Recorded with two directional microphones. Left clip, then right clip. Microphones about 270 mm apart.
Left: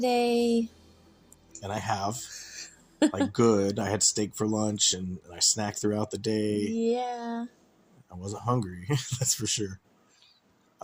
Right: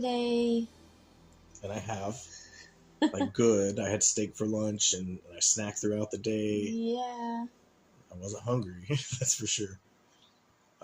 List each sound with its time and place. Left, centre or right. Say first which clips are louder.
0.0 s speech: left 5 dB; left
1.6 s speech: left 6 dB; left